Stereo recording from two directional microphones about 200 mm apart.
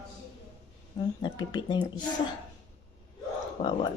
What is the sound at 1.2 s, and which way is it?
Speech, 20° left (ahead or behind).